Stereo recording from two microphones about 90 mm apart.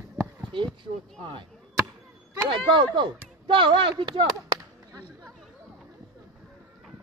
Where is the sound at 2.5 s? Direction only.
65° right (ahead or behind).